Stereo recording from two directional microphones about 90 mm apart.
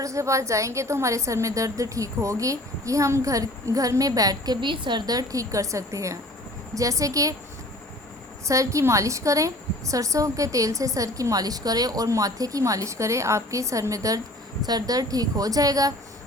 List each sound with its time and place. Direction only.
0.0 s a woman's voice: 35° right (ahead or behind)
4.6 s a woman's voice: 60° right (ahead or behind); by 7.3 s 40° right (ahead or behind)
8.4 s a woman's voice: 35° right (ahead or behind)